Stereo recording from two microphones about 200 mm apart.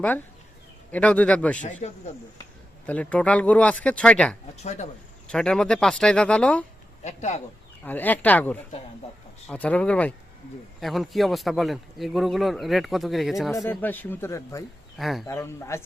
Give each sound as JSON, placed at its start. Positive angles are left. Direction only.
{"t": 0.9, "sound": "speech", "side_deg": 5}
{"t": 1.6, "sound": "a man's voice", "side_deg": 40}
{"t": 2.8, "sound": "speech", "side_deg": 5}
{"t": 4.5, "sound": "a man's voice", "side_deg": 35}
{"t": 5.3, "sound": "speech", "side_deg": 5}
{"t": 7.0, "sound": "a man's voice", "side_deg": 35}
{"t": 7.9, "sound": "speech", "side_deg": 10}
{"t": 13.5, "sound": "speech", "side_deg": 10}
{"t": 14.9, "sound": "speech", "side_deg": 0}
{"t": 15.3, "sound": "speech", "side_deg": 15}